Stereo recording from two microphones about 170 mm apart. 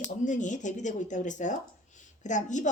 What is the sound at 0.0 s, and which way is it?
Speech, 45° left (ahead or behind).